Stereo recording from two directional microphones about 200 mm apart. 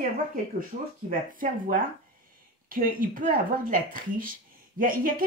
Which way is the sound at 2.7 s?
45° right (ahead or behind).